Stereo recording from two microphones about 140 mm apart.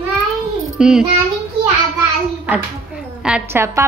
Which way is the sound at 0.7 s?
5° right (ahead or behind).